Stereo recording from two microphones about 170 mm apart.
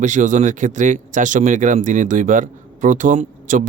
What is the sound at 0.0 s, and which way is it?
Speech, 45° right (ahead or behind).